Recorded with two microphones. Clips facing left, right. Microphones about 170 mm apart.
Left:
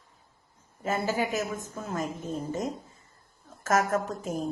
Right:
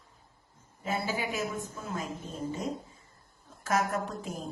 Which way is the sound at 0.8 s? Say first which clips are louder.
Left 4 dB; 45° left (ahead or behind).